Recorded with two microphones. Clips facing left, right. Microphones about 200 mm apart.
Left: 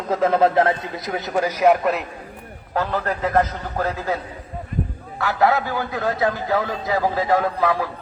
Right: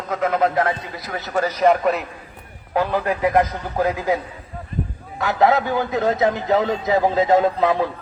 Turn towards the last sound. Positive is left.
turn(degrees=-20)  # may be behind; listen again after turning